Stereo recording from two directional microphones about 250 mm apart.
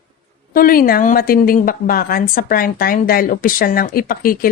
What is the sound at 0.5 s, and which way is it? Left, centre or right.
A woman's voice, left.